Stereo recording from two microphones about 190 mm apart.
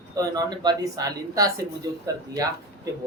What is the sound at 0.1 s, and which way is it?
Speech, 20° right (ahead or behind).